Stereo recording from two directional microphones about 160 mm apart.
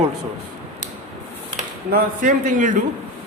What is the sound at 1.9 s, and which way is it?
Speech, 55° right (ahead or behind).